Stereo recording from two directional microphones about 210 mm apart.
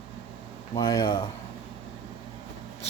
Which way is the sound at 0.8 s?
20° left (ahead or behind).